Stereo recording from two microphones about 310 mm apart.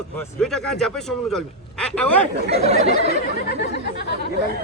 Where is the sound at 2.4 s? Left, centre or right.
Centre.